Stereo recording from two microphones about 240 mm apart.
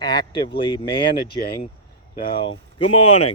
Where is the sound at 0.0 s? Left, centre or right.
Centre.